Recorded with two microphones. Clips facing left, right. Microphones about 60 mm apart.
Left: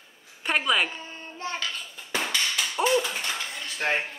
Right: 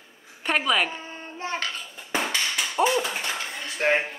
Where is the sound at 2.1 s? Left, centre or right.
Centre.